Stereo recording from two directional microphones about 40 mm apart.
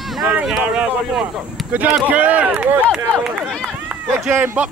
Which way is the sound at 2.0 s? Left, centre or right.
Right.